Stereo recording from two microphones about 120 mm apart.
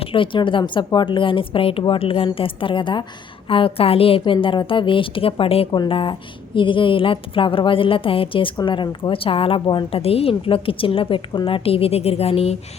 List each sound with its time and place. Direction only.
0.0 s speech: 45° left (ahead or behind)